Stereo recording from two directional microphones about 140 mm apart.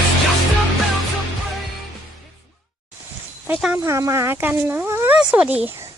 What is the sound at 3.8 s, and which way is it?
Speech, 20° right (ahead or behind).